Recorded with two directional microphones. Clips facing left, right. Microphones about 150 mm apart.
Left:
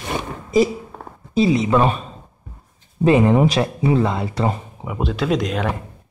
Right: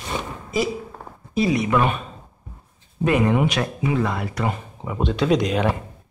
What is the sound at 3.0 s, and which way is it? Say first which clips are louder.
Speech: left 5 dB; 30° left (ahead or behind).